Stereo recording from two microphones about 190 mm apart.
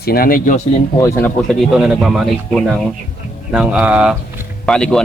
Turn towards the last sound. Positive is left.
turn(degrees=5)  # may be behind; listen again after turning